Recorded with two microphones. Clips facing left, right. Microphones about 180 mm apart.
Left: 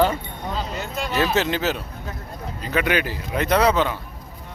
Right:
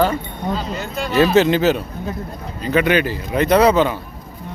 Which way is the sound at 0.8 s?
20° left (ahead or behind).